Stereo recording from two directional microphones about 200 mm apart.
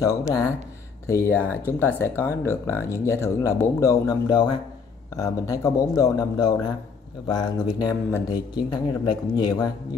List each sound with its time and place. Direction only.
0.0 s speech: 15° left (ahead or behind)